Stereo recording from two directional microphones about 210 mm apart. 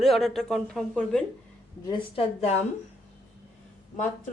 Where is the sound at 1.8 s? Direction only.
25° left (ahead or behind).